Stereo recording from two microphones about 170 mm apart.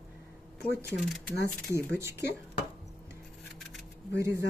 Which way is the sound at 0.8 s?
5° right (ahead or behind).